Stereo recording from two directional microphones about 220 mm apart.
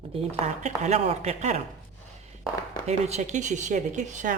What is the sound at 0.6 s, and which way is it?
Speech, 30° right (ahead or behind).